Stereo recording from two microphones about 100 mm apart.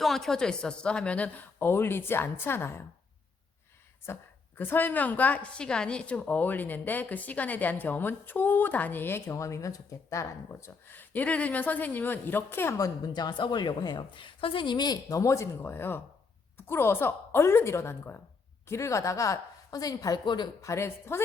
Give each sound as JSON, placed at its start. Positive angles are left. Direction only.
{"t": 0.0, "sound": "a woman's voice", "side_deg": 5}
{"t": 4.0, "sound": "a woman's voice", "side_deg": 25}
{"t": 10.9, "sound": "a woman's voice", "side_deg": 15}
{"t": 12.8, "sound": "a woman's voice", "side_deg": 40}
{"t": 15.2, "sound": "a woman's voice", "side_deg": 30}
{"t": 20.2, "sound": "a woman's voice", "side_deg": 50}
{"t": 20.6, "sound": "speech", "side_deg": 30}